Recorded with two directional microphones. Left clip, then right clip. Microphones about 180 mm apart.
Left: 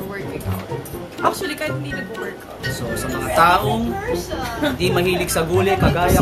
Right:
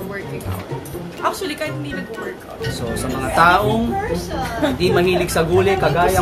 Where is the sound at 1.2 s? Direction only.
Centre (ahead or behind).